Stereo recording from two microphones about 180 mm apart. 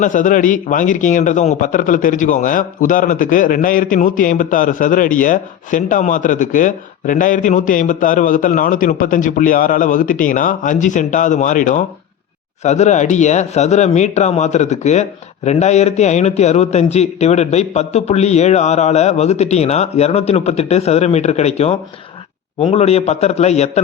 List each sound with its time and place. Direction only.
0.0 s a man's voice: 45° left (ahead or behind)